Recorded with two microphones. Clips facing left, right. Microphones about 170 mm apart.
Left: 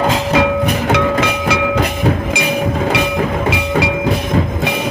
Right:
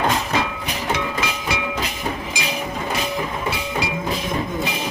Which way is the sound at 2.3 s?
60° left (ahead or behind).